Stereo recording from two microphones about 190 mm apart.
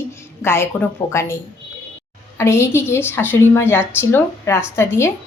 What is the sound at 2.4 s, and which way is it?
A woman's voice, 15° left (ahead or behind).